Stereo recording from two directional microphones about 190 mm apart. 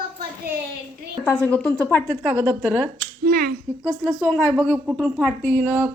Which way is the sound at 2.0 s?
10° right (ahead or behind).